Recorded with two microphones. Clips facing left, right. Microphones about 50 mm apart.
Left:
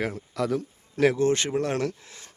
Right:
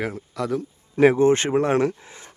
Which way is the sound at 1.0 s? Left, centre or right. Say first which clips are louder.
Right 6 dB; right.